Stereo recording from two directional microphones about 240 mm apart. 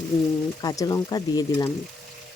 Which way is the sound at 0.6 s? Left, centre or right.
Centre.